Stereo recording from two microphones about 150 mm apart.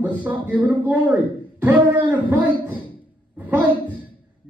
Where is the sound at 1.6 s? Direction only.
15° right (ahead or behind).